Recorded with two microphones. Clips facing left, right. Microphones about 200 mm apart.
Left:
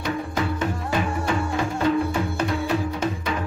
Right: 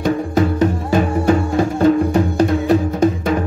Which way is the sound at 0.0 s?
40° right (ahead or behind).